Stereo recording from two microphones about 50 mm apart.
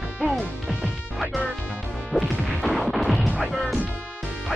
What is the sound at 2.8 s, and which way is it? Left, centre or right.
Smash, centre.